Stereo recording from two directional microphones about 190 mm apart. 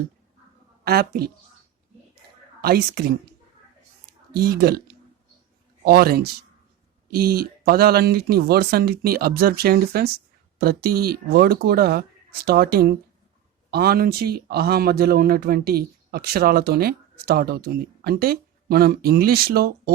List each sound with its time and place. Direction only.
0.9 s speech: 55° right (ahead or behind)
2.6 s speech: 55° right (ahead or behind)
4.4 s speech: 55° right (ahead or behind)